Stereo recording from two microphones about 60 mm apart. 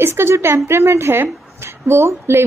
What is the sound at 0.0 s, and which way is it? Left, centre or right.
A woman's voice, right.